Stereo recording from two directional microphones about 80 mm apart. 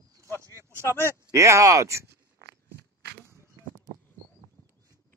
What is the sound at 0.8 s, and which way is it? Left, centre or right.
Speech, left.